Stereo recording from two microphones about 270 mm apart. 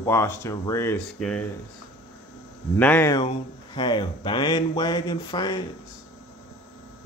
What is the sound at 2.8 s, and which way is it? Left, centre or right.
Speech, centre.